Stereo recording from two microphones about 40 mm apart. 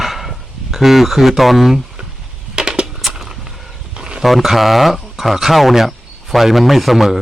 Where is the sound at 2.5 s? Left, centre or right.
Centre.